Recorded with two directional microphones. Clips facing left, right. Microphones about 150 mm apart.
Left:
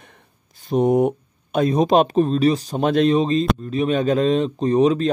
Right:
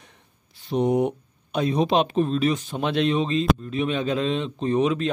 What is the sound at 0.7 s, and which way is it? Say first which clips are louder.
A man's voice: left 4 dB; 45° left (ahead or behind).